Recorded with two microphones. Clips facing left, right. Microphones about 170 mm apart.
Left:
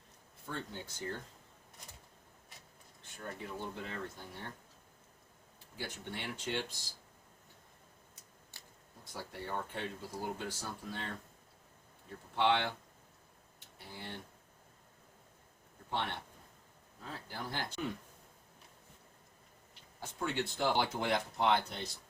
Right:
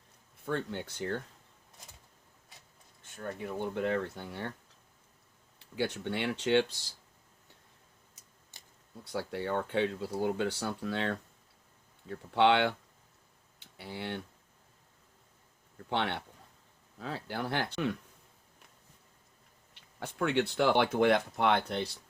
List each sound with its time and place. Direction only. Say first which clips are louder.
0.4 s speech: right 8 dB; 70° right (ahead or behind)
3.6 s speech: right 14 dB; 70° right (ahead or behind)
5.5 s speech: right 11 dB; 70° right (ahead or behind)
9.1 s speech: right 8 dB; 70° right (ahead or behind)
15.9 s speech: right 6 dB; 75° right (ahead or behind)
19.7 s speech: right 6 dB; 70° right (ahead or behind)